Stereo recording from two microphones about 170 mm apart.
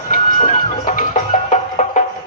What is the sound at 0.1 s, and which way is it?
Music, 45° left (ahead or behind).